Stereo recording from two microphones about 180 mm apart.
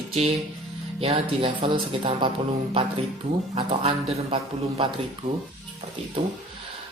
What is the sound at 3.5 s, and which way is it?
Speech, 30° right (ahead or behind).